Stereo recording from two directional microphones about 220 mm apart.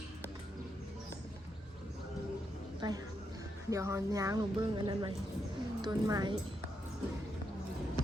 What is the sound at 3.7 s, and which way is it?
Speech, 15° right (ahead or behind).